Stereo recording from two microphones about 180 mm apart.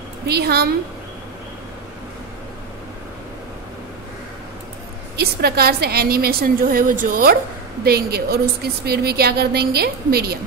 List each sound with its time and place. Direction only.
0.3 s a woman's voice: 60° right (ahead or behind)
5.1 s a woman's voice: 60° right (ahead or behind)